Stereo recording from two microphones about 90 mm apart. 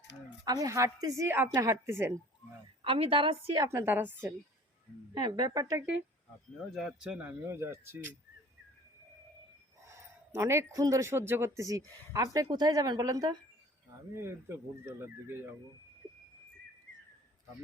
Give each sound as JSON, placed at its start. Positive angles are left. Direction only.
{"t": 0.4, "sound": "speech", "side_deg": -45}
{"t": 2.8, "sound": "a woman's voice", "side_deg": -85}
{"t": 3.6, "sound": "speech", "side_deg": -30}
{"t": 5.1, "sound": "a woman's voice", "side_deg": -50}
{"t": 6.7, "sound": "speech", "side_deg": -5}
{"t": 7.3, "sound": "speech", "side_deg": -30}
{"t": 9.8, "sound": "speech", "side_deg": -35}
{"t": 14.1, "sound": "speech", "side_deg": -30}